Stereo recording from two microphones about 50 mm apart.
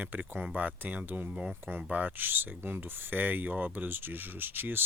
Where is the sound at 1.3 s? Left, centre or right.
Centre.